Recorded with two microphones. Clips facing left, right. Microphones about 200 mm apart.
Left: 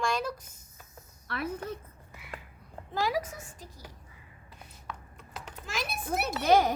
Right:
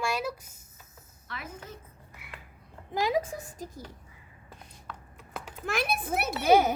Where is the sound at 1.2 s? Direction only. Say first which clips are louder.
Left 8 dB; 65° left (ahead or behind).